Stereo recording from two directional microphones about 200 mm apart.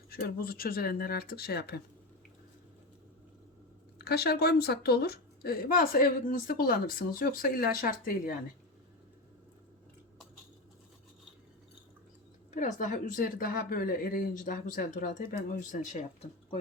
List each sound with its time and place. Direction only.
0.1 s a woman's voice: 50° left (ahead or behind)
3.9 s a woman's voice: 50° left (ahead or behind)
12.5 s a woman's voice: 35° left (ahead or behind)